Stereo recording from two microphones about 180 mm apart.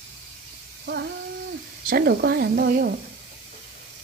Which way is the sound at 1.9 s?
65° right (ahead or behind).